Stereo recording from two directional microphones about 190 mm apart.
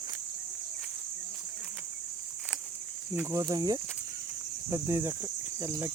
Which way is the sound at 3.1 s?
15° right (ahead or behind).